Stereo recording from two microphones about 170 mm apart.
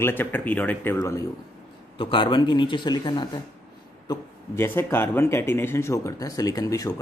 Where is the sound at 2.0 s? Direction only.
30° left (ahead or behind).